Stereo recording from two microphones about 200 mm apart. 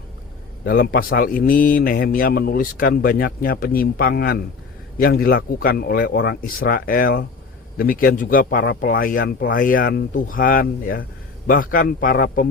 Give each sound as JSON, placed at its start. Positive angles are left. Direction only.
{"t": 0.6, "sound": "speech", "side_deg": 45}